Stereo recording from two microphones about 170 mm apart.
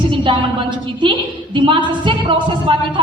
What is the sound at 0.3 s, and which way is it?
Speech, 30° right (ahead or behind).